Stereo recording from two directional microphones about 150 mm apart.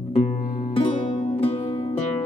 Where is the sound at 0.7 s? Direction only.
40° left (ahead or behind).